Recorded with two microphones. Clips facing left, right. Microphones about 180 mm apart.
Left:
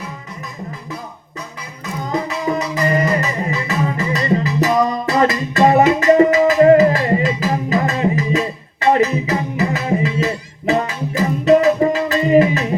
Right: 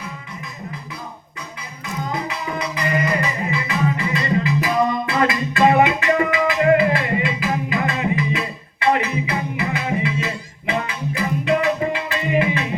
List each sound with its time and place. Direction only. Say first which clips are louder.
2.2 s music: left 6 dB; 40° left (ahead or behind)